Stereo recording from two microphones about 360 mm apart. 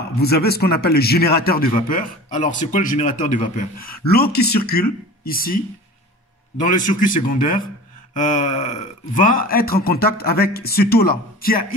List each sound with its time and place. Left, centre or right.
0.2 s speech: left
6.6 s speech: left